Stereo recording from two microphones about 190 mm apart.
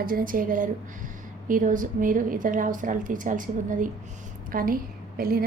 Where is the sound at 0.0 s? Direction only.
50° right (ahead or behind).